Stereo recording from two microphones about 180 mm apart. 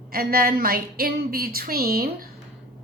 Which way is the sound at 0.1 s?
55° right (ahead or behind).